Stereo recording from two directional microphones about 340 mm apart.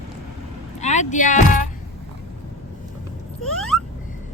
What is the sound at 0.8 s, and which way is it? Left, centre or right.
Speech, left.